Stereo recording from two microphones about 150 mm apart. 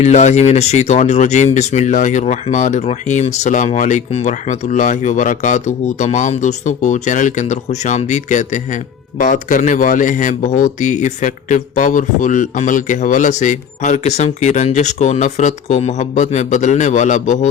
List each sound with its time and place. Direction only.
0.0 s speech: 50° left (ahead or behind)